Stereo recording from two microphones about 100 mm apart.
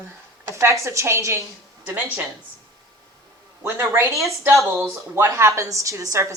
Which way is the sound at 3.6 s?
20° right (ahead or behind).